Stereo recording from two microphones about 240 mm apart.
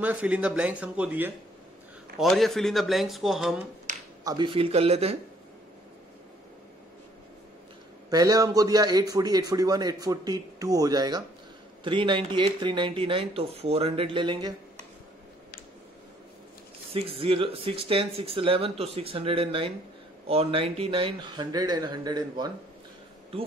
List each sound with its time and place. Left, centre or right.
0.0 s speech: centre
4.2 s speech: centre
8.1 s a man's voice: centre
16.9 s speech: right